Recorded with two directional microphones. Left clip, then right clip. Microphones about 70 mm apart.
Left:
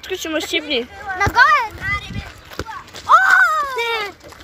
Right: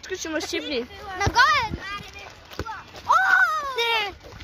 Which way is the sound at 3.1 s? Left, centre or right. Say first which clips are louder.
Left 7 dB; centre.